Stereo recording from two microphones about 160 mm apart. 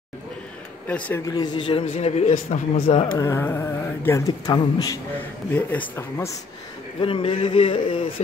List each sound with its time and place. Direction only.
0.8 s carnatic music: 10° left (ahead or behind)
1.2 s speech: 25° left (ahead or behind)
3.2 s carnatic music: 15° left (ahead or behind)
4.5 s speech: 25° left (ahead or behind)
5.5 s carnatic music: 10° left (ahead or behind)
7.0 s speech: 35° left (ahead or behind)